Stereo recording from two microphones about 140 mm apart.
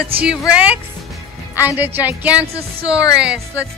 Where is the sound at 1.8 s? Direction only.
10° right (ahead or behind).